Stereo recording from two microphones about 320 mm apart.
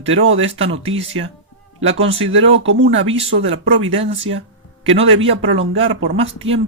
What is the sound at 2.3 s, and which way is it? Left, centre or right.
Speech, right.